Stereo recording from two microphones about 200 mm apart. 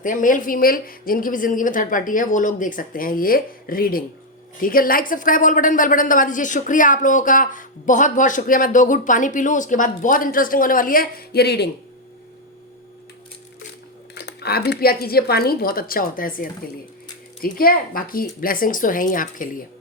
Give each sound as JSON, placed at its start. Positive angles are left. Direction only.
{"t": 0.0, "sound": "a woman's voice", "side_deg": 40}
{"t": 14.2, "sound": "speech", "side_deg": 55}